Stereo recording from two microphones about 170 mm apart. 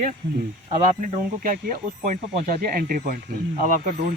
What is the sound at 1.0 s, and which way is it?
Speech, 50° right (ahead or behind).